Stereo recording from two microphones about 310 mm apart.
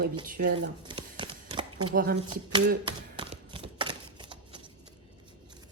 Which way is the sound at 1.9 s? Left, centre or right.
Right.